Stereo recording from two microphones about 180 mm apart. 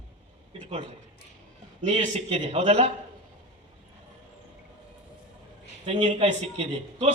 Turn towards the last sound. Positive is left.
turn(degrees=-35)  # may be behind; listen again after turning